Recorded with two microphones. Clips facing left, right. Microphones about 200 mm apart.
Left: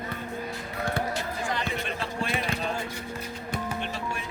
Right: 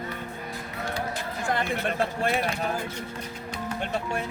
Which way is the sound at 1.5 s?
55° right (ahead or behind).